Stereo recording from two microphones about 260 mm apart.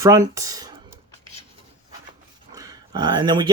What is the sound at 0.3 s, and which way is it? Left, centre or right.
Speech, centre.